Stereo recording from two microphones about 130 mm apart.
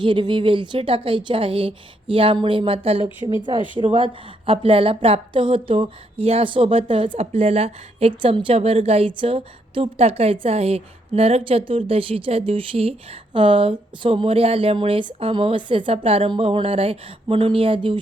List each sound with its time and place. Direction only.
0.0 s a woman's voice: 40° right (ahead or behind)